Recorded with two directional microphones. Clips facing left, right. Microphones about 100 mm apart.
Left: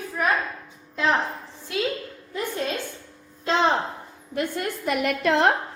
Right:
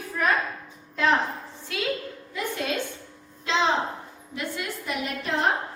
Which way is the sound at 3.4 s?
50° left (ahead or behind).